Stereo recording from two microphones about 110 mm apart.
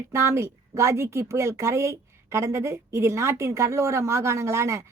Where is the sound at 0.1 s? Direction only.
25° right (ahead or behind).